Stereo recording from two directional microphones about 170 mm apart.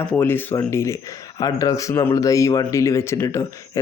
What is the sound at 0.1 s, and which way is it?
Speech, 10° left (ahead or behind).